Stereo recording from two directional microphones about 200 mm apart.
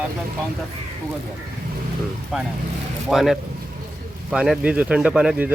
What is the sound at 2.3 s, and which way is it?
A man's voice, 5° right (ahead or behind).